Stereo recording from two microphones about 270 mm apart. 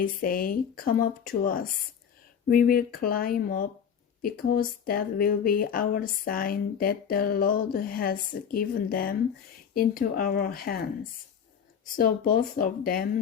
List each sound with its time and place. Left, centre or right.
0.0 s speech: left
11.9 s speech: left